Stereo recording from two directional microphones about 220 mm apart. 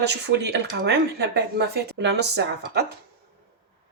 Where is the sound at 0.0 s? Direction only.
50° right (ahead or behind).